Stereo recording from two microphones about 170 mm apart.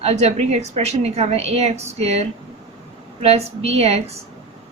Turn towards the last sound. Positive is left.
turn(degrees=-40)  # may be behind; listen again after turning